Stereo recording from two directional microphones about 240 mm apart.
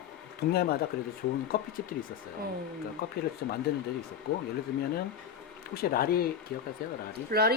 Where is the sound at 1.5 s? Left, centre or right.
Left.